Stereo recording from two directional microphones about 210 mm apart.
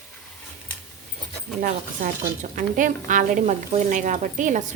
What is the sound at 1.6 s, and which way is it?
Speech, 35° right (ahead or behind).